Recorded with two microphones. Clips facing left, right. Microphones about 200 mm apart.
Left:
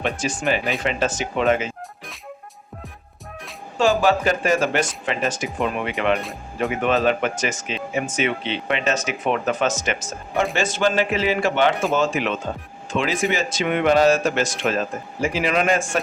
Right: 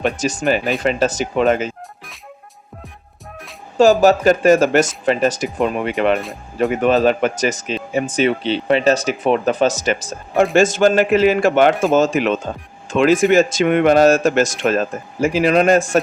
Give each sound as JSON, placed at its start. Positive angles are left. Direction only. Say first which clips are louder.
{"t": 0.0, "sound": "speech", "louder": "right 5 dB", "side_deg": -40}
{"t": 3.8, "sound": "speech", "louder": "right 7 dB", "side_deg": -40}
{"t": 10.5, "sound": "speech", "louder": "right 9 dB", "side_deg": -45}